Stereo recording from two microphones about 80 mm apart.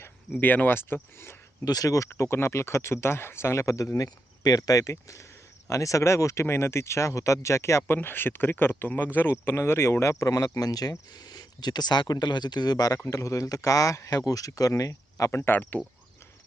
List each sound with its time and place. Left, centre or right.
0.0 s speech: left
1.6 s speech: left
3.9 s speech: left
13.1 s speech: left